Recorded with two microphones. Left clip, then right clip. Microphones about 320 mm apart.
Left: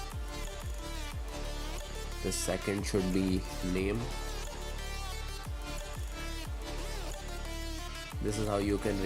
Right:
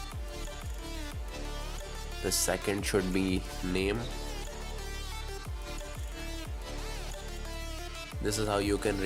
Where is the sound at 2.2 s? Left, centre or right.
Right.